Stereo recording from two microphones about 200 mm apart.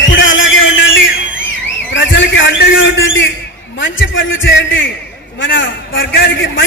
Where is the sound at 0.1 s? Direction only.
70° left (ahead or behind).